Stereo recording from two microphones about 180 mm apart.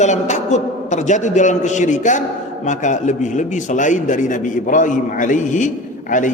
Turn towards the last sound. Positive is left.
turn(degrees=45)  # may be behind; listen again after turning